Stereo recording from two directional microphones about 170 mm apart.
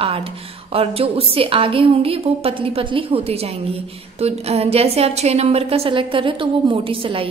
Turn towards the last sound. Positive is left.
turn(degrees=-30)  # may be behind; listen again after turning